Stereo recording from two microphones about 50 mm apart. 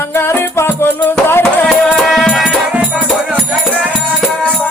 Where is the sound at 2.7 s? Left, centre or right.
Right.